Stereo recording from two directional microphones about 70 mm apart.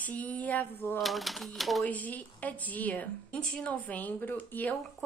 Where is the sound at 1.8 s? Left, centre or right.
Left.